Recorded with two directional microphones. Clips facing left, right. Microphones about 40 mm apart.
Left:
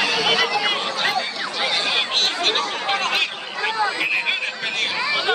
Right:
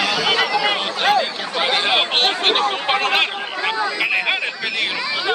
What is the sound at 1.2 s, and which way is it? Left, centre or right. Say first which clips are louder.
Speech: right 4 dB; right.